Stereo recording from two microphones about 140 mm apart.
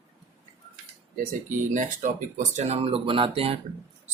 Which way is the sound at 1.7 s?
60° right (ahead or behind).